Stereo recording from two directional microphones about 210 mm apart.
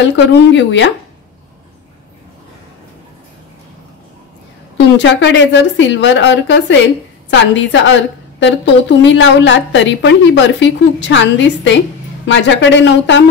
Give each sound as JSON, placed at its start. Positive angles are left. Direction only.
{"t": 0.0, "sound": "a woman's voice", "side_deg": 60}
{"t": 4.7, "sound": "a woman's voice", "side_deg": 60}